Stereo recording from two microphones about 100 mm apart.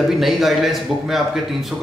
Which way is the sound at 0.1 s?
Centre (ahead or behind).